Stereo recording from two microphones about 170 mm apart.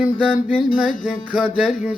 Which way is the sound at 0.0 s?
5° right (ahead or behind).